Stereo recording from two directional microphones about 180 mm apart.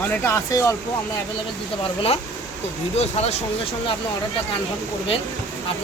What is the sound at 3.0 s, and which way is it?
Speech, 35° left (ahead or behind).